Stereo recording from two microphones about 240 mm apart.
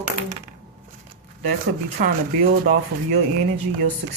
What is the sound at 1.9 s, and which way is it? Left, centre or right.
Speech, right.